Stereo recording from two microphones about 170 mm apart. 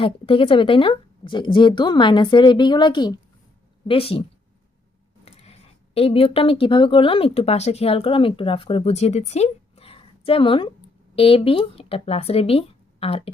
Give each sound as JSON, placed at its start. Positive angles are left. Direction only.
{"t": 0.0, "sound": "speech", "side_deg": 30}
{"t": 5.2, "sound": "speech", "side_deg": 35}